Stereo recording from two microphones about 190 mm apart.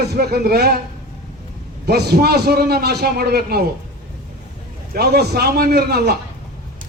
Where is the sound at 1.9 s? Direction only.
55° right (ahead or behind).